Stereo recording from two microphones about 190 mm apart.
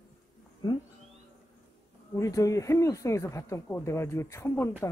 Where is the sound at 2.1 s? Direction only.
15° left (ahead or behind).